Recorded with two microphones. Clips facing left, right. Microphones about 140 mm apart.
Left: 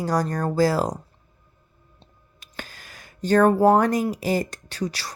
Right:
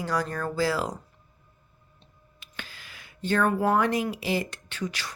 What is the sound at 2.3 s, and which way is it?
Speech, 40° left (ahead or behind).